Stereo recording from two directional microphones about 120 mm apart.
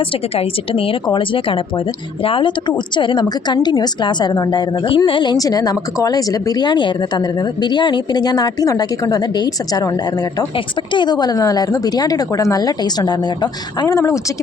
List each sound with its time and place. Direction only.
0.3 s a woman's voice: 50° left (ahead or behind)
10.9 s speech: 40° left (ahead or behind)